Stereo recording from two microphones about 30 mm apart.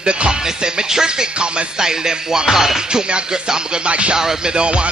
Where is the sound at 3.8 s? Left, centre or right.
Right.